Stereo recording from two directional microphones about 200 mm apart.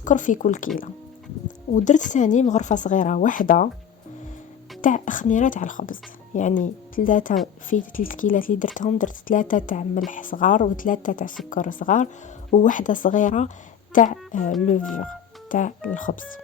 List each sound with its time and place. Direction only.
0.0 s speech: 40° left (ahead or behind)
4.8 s speech: 40° left (ahead or behind)